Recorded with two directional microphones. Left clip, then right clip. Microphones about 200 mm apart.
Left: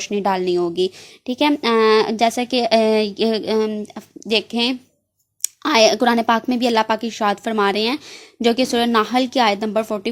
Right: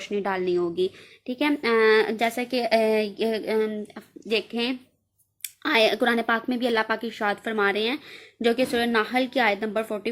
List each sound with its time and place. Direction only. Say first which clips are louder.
0.1 s a woman's voice: left 6 dB; 40° left (ahead or behind)